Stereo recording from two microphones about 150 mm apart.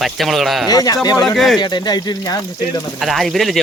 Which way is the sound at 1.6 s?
30° left (ahead or behind).